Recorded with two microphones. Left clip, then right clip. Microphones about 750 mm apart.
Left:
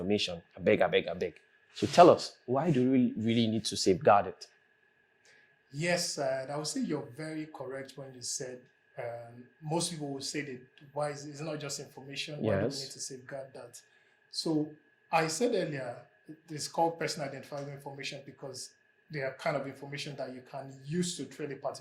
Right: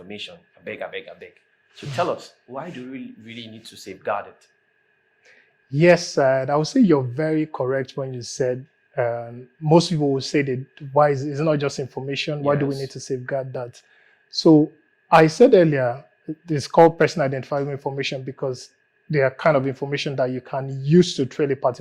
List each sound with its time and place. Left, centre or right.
0.1 s speech: left
2.5 s speech: left
5.7 s speech: right